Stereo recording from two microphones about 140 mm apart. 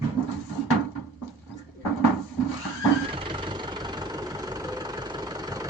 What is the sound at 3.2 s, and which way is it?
Vehicle, 35° right (ahead or behind).